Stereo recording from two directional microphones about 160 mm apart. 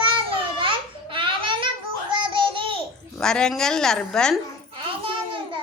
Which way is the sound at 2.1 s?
30° right (ahead or behind).